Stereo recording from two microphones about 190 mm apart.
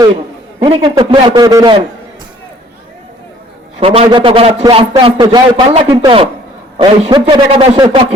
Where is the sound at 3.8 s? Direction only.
30° right (ahead or behind).